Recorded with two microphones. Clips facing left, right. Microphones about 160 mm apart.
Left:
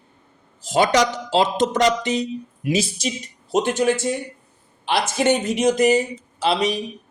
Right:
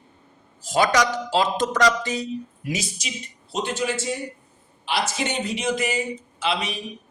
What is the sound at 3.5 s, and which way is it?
A man's voice, 50° left (ahead or behind).